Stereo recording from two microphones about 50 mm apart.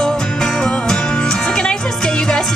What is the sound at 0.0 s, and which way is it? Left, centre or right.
Music, centre.